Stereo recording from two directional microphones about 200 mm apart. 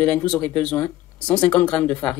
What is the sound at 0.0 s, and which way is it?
Speech, 5° left (ahead or behind).